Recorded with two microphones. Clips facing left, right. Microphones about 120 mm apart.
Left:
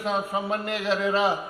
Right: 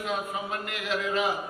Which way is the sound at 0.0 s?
30° left (ahead or behind).